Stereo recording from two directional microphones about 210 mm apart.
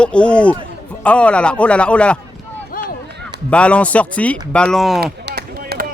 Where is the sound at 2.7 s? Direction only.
45° left (ahead or behind).